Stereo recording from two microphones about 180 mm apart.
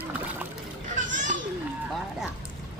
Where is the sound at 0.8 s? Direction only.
45° right (ahead or behind).